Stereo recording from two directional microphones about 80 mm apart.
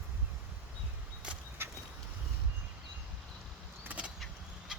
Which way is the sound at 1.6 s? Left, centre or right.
Right.